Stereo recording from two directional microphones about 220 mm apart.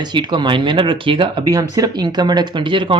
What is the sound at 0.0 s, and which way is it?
Speech, 20° right (ahead or behind).